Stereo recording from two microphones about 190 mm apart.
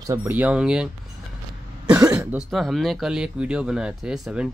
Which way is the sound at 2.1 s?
Centre (ahead or behind).